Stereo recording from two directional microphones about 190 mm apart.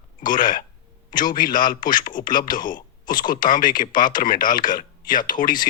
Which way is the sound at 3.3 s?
45° left (ahead or behind).